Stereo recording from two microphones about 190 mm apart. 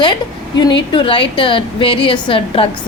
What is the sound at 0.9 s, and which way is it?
A woman's voice, 25° left (ahead or behind).